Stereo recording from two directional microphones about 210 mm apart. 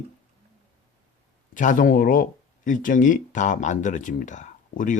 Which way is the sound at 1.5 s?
35° left (ahead or behind).